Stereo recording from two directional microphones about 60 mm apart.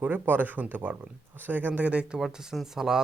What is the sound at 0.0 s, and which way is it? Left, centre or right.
Speech, right.